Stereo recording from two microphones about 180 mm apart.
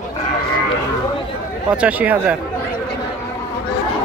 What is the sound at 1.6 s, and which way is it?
Speech, 5° right (ahead or behind).